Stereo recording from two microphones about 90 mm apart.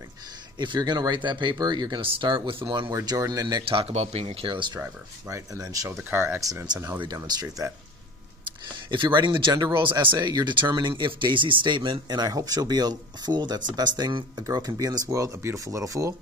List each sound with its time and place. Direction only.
0.6 s speech: 55° right (ahead or behind); by 2.2 s 75° right (ahead or behind)
2.2 s speech: 65° right (ahead or behind)
3.1 s speech: 45° right (ahead or behind)
3.6 s a man's voice: 90° right
4.4 s speech: 65° right (ahead or behind)
5.3 s speech: 40° right (ahead or behind)
6.0 s speech: 25° right (ahead or behind)
6.4 s speech: 45° right (ahead or behind)
8.7 s speech: 60° right (ahead or behind)
9.5 s speech: 50° right (ahead or behind)
9.8 s speech: 70° right (ahead or behind)
10.1 s speech: 50° right (ahead or behind)